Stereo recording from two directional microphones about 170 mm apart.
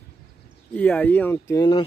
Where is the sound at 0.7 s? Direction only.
10° left (ahead or behind).